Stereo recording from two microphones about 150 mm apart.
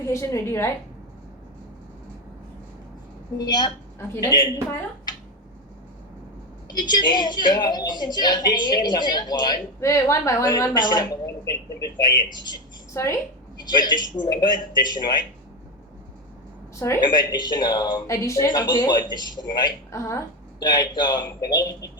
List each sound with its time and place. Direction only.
0.1 s a woman's voice: 15° left (ahead or behind)
3.3 s speech: 25° left (ahead or behind)
6.7 s speech: 30° left (ahead or behind)
17.0 s speech: 30° left (ahead or behind)